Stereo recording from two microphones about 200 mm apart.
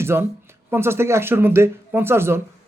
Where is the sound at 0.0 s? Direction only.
10° right (ahead or behind).